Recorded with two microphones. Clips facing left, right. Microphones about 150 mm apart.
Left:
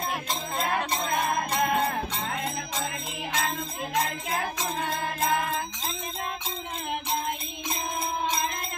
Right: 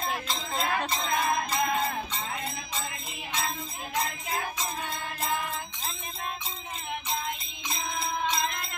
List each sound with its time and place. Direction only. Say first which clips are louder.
0.3 s music: left 2 dB; 45° left (ahead or behind)
1.5 s music: left 3 dB; 65° left (ahead or behind); by 5.6 s 90° left